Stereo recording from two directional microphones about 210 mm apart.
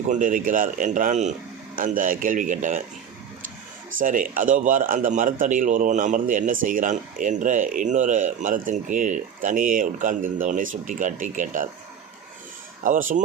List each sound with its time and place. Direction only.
0.1 s a man's voice: 40° right (ahead or behind)
4.0 s a man's voice: 40° right (ahead or behind)
12.8 s a man's voice: 40° right (ahead or behind)